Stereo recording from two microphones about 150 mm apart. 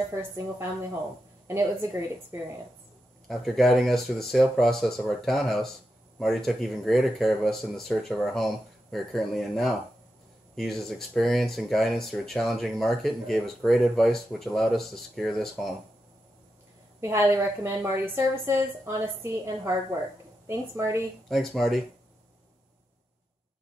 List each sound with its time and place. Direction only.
0.1 s a woman's voice: 15° right (ahead or behind)
3.3 s speech: centre (ahead or behind)
17.0 s a woman's voice: 20° right (ahead or behind)
21.3 s speech: centre (ahead or behind)